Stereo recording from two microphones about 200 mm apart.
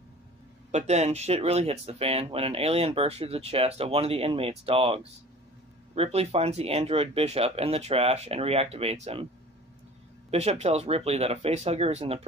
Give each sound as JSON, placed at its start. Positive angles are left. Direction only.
{"t": 0.7, "sound": "speech", "side_deg": -35}
{"t": 10.3, "sound": "speech", "side_deg": -30}